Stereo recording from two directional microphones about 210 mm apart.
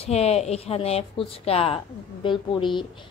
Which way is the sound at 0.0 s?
30° left (ahead or behind).